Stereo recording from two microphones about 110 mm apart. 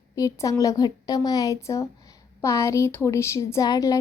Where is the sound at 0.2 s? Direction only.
30° left (ahead or behind).